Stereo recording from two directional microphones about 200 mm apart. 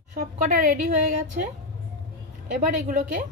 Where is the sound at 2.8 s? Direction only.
40° right (ahead or behind).